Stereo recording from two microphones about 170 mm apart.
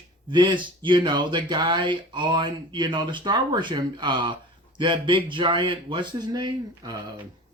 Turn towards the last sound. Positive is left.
turn(degrees=-25)  # may be behind; listen again after turning